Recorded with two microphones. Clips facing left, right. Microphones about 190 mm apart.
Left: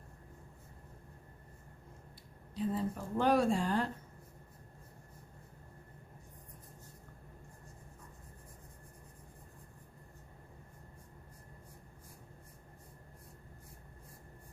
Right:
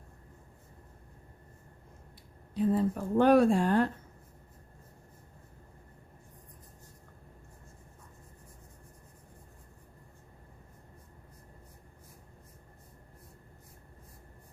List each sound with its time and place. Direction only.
2.6 s a woman's voice: 60° right (ahead or behind)